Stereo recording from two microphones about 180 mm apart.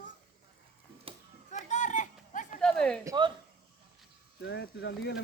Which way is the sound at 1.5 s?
45° left (ahead or behind).